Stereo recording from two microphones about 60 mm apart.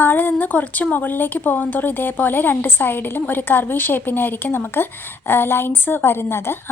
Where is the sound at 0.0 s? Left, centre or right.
Left.